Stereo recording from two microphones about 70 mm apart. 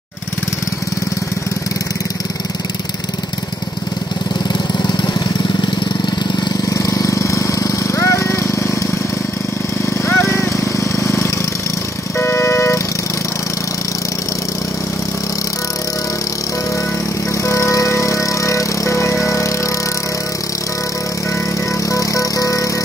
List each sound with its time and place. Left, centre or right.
4.7 s vehicle: left
6.7 s vehicle: left
10.0 s a sound: left
12.2 s music: left
17.5 s music: left
21.9 s music: left